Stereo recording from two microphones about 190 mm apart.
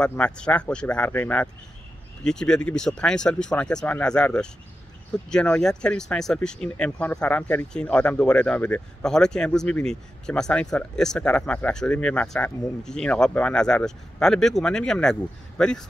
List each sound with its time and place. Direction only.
0.0 s speech: 5° left (ahead or behind)